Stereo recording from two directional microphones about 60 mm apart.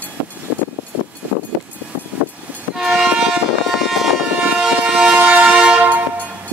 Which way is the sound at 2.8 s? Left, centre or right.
Centre.